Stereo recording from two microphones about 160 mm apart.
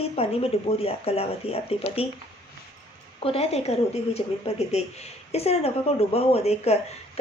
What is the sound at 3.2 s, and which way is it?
Speech, 40° left (ahead or behind).